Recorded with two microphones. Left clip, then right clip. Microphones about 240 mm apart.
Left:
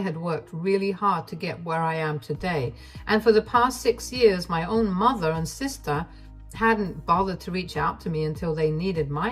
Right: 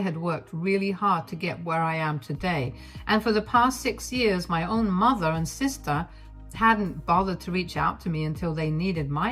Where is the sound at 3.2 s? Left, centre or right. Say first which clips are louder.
Left 3 dB; right.